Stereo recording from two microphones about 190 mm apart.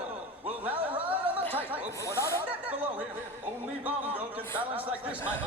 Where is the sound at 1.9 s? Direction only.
15° left (ahead or behind).